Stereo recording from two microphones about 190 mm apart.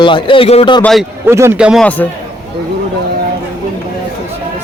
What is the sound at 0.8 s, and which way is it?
Speech, centre (ahead or behind).